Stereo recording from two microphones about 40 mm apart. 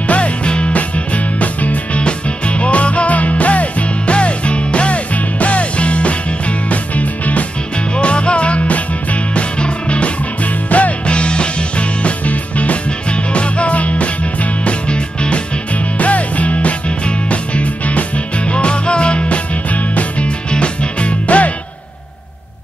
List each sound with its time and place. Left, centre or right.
0.0 s music: left
7.9 s music: left